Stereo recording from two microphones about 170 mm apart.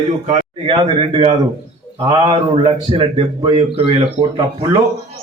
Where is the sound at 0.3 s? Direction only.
35° right (ahead or behind).